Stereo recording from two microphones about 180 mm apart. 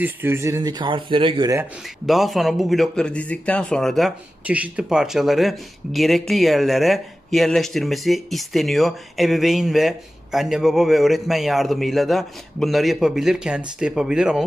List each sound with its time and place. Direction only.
0.0 s speech: 10° right (ahead or behind); by 1.5 s 30° right (ahead or behind)
2.0 s speech: centre (ahead or behind)